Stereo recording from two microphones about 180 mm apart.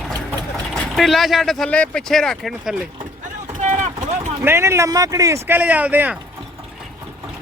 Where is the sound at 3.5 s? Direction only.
40° right (ahead or behind).